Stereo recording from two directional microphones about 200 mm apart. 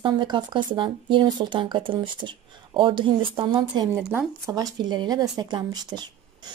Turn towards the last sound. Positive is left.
turn(degrees=-20)  # may be behind; listen again after turning